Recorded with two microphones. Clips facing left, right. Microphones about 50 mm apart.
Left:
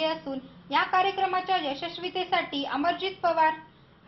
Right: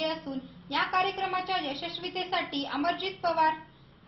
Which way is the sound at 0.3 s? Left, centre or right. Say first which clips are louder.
Left 3 dB; left.